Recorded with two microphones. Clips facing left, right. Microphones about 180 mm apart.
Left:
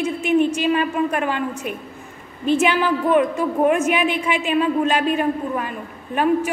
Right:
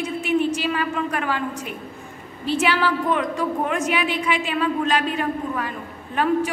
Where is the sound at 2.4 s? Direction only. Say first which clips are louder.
Left 3 dB; 20° left (ahead or behind).